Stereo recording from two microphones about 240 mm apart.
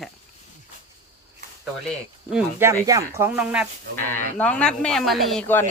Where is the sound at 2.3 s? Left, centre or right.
Centre.